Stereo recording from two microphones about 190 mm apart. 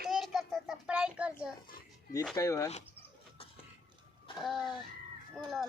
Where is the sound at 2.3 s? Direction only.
15° left (ahead or behind).